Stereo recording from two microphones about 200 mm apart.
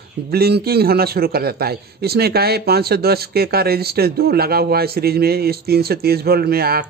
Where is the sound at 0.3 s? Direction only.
50° right (ahead or behind).